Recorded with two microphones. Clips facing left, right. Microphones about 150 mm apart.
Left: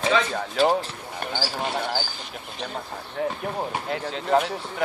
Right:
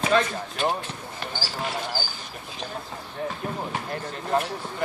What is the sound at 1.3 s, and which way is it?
Speech, 60° left (ahead or behind).